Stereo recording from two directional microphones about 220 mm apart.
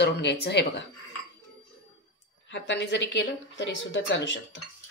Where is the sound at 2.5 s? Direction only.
55° left (ahead or behind).